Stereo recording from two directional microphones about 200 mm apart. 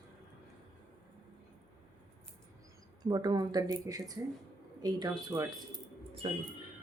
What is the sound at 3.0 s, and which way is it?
Speech, 20° right (ahead or behind).